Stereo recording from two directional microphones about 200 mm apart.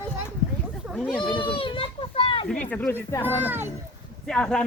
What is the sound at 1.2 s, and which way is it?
A child's voice, 25° left (ahead or behind).